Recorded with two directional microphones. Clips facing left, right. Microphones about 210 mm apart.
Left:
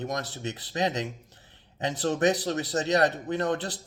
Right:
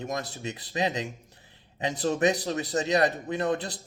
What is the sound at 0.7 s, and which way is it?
A man's voice, 15° right (ahead or behind).